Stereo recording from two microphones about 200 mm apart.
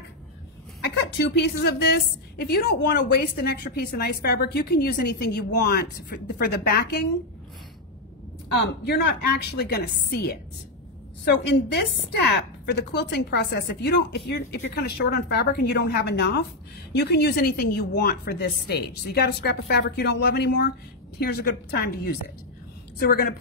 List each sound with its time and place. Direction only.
0.7 s a woman's voice: 55° left (ahead or behind)
8.5 s a woman's voice: 55° left (ahead or behind)